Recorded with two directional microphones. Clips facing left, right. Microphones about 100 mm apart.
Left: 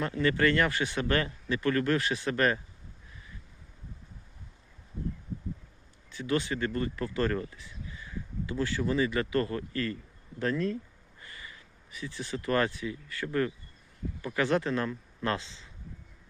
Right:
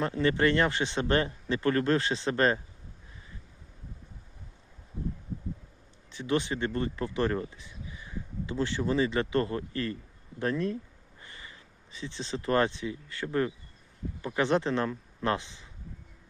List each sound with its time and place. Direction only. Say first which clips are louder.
0.0 s speech: right 1 dB; 25° right (ahead or behind)
6.1 s speech: right 1 dB; 20° right (ahead or behind)